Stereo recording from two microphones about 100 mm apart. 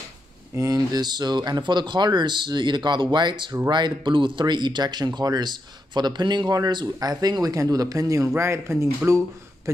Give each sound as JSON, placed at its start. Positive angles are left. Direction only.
{"t": 0.6, "sound": "speech", "side_deg": -35}